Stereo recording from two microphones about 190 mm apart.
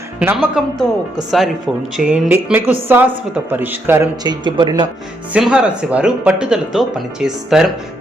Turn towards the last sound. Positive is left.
turn(degrees=0)  # may be behind; listen again after turning